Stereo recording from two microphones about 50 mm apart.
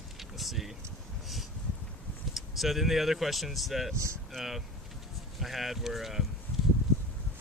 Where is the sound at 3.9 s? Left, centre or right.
Right.